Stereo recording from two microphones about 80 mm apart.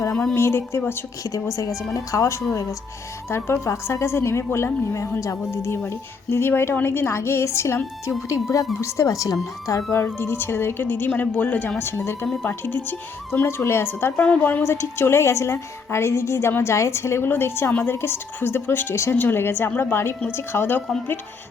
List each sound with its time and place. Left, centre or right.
0.3 s a woman's voice: left
9.9 s a woman's voice: left
14.2 s a woman's voice: centre
14.6 s a woman's voice: left